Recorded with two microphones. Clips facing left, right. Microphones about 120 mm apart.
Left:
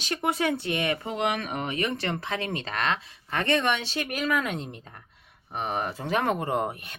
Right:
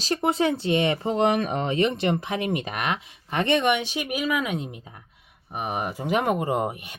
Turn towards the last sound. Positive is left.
turn(degrees=-10)  # may be behind; listen again after turning